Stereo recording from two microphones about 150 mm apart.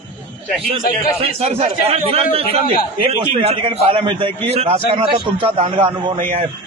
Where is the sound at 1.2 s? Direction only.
45° right (ahead or behind).